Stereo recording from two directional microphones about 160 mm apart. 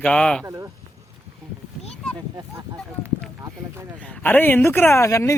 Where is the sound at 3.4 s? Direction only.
15° right (ahead or behind).